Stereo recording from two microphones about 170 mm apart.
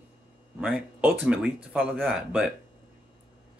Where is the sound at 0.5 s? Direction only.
5° right (ahead or behind).